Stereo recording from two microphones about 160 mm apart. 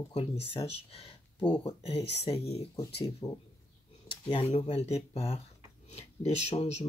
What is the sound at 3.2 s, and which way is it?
Speech, 20° left (ahead or behind).